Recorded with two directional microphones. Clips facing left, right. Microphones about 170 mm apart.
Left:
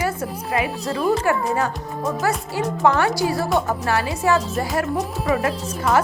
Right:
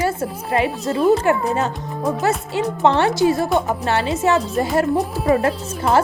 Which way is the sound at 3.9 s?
25° right (ahead or behind).